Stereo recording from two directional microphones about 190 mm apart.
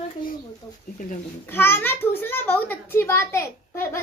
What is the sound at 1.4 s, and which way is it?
A woman's voice, 10° left (ahead or behind).